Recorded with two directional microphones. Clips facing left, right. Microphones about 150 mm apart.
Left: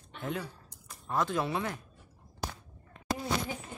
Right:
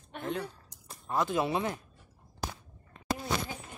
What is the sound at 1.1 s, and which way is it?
Speech, 5° right (ahead or behind).